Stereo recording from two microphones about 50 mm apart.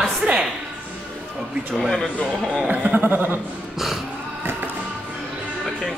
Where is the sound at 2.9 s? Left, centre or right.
Right.